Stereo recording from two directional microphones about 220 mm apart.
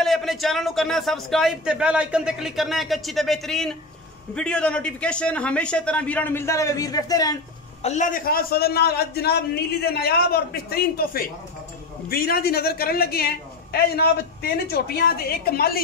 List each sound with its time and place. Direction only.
0.0 s speech: centre (ahead or behind); by 7.3 s 15° left (ahead or behind)
7.8 s a man's voice: 35° left (ahead or behind)